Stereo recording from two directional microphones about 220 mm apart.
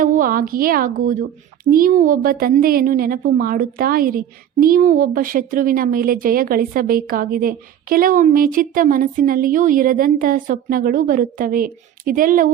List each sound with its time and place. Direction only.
0.0 s a woman's voice: 35° right (ahead or behind)